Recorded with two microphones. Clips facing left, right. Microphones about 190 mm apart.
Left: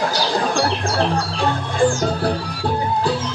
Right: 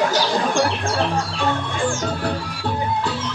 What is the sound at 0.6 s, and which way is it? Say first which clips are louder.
Music: left 2 dB; 35° left (ahead or behind).